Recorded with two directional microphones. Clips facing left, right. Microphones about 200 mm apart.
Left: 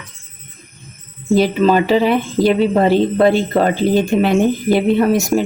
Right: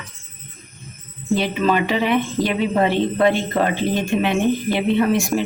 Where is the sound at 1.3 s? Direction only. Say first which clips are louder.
Left 6 dB; 35° left (ahead or behind).